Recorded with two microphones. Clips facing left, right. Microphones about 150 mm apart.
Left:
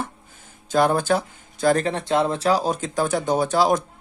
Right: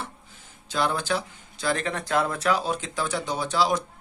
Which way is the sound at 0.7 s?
50° left (ahead or behind).